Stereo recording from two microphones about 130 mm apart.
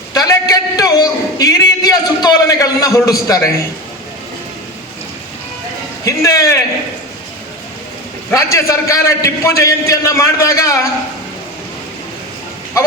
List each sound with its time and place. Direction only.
0.1 s a sound: 30° left (ahead or behind)
6.1 s a man's voice: 25° left (ahead or behind)
8.3 s a man's voice: 25° left (ahead or behind)